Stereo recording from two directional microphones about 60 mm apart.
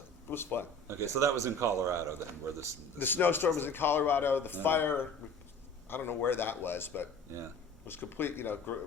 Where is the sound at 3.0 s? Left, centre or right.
Left.